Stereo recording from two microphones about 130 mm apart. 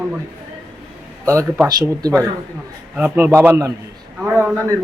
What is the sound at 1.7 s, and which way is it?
A man's voice, 30° right (ahead or behind).